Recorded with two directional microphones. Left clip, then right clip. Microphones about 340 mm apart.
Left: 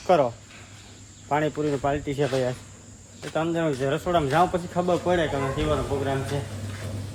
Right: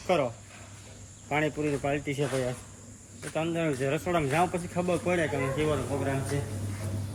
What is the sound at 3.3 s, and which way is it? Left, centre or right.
Speech, centre.